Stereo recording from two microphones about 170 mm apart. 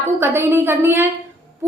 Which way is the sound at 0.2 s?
15° right (ahead or behind).